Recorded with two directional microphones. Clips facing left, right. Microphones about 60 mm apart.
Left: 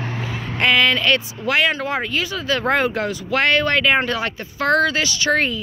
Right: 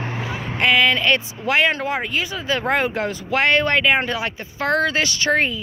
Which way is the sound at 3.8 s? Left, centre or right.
Centre.